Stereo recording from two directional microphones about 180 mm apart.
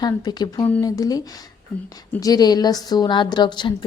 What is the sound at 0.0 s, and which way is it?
A woman's voice, 20° left (ahead or behind).